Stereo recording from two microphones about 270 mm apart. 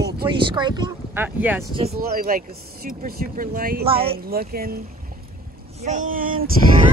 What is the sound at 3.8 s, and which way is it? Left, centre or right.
Music, centre.